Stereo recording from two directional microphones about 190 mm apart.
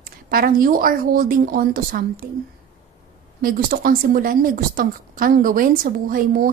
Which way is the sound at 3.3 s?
50° right (ahead or behind).